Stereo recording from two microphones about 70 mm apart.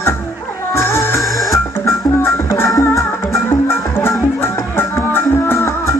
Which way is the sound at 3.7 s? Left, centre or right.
Left.